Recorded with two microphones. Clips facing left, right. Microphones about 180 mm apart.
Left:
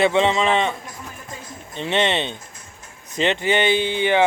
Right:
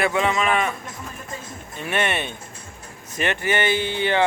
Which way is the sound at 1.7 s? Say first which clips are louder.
Left 4 dB; 20° left (ahead or behind).